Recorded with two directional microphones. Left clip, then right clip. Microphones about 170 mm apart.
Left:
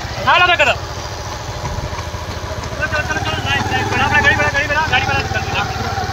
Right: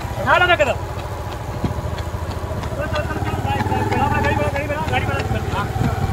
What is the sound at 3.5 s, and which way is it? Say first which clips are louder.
Vehicle: left 3 dB; 45° right (ahead or behind).